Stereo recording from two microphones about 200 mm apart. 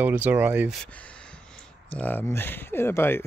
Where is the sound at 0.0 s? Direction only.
10° right (ahead or behind).